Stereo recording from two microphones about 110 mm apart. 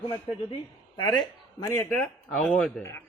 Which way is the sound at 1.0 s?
40° left (ahead or behind).